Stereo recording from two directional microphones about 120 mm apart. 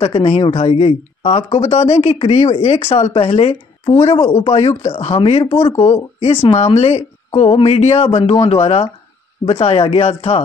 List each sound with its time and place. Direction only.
0.0 s speech: 55° left (ahead or behind)